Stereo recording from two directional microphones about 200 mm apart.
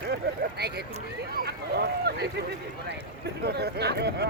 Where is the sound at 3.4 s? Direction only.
55° right (ahead or behind).